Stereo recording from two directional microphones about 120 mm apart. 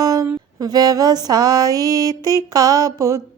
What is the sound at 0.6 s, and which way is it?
Mantra, 30° right (ahead or behind).